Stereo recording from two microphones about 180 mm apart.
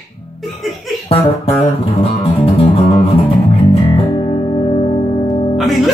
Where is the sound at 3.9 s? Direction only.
30° left (ahead or behind).